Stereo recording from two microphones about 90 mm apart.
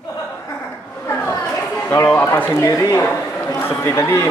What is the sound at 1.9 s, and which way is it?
A man's voice, 30° left (ahead or behind).